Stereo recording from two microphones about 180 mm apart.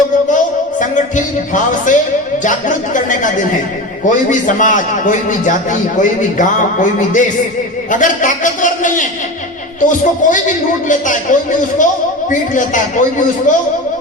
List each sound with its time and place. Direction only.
0.3 s a man's voice: 45° left (ahead or behind)